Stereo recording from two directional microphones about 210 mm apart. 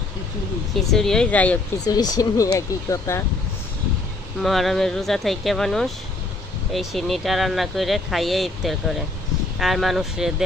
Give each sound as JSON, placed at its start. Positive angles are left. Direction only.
{"t": 0.9, "sound": "speech", "side_deg": 0}
{"t": 1.9, "sound": "speech", "side_deg": 20}
{"t": 4.4, "sound": "speech", "side_deg": 0}